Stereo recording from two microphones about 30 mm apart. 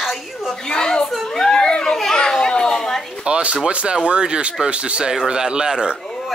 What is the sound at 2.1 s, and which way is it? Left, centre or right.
Children playing, left.